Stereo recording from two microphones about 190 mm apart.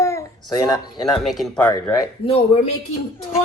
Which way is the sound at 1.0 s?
Centre (ahead or behind).